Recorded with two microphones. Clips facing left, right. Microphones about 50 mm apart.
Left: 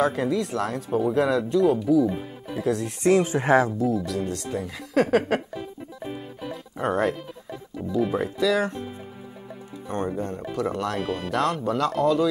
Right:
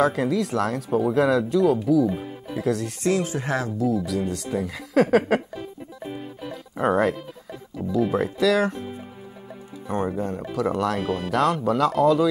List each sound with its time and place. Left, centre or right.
0.0 s speech: centre
3.0 s speech: left
3.7 s speech: centre